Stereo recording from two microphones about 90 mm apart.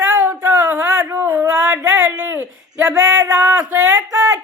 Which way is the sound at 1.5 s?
10° right (ahead or behind).